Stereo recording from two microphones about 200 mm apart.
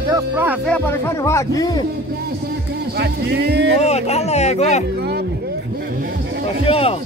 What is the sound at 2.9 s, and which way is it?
Speech, 55° right (ahead or behind).